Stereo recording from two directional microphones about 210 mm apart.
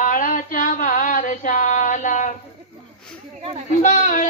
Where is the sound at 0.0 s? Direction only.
40° left (ahead or behind).